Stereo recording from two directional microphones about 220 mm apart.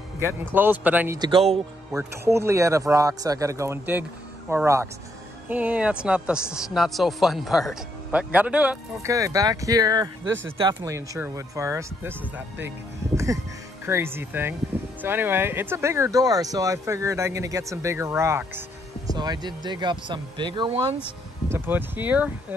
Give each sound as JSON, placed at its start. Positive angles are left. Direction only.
{"t": 0.5, "sound": "speech", "side_deg": -10}
{"t": 1.9, "sound": "a man's voice", "side_deg": -10}
{"t": 21.5, "sound": "speech", "side_deg": -10}